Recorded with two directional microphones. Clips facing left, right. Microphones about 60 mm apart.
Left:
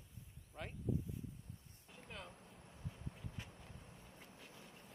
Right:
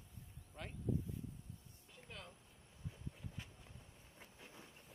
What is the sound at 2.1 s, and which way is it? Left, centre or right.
Speech, centre.